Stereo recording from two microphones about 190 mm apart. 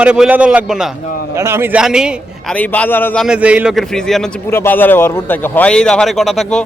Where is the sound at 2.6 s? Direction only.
10° left (ahead or behind).